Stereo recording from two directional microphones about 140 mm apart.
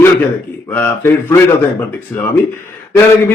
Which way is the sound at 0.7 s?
15° left (ahead or behind).